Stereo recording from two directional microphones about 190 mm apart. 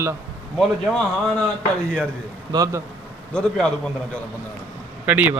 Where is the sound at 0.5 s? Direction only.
Centre (ahead or behind).